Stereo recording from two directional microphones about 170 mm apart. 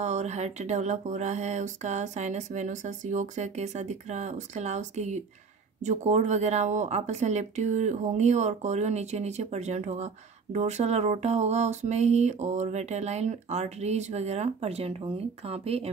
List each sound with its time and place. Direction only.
0.0 s speech: 40° right (ahead or behind)